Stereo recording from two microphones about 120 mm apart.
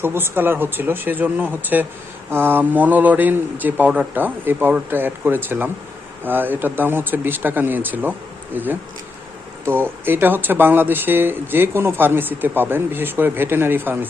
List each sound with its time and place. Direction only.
0.0 s speech: 20° right (ahead or behind)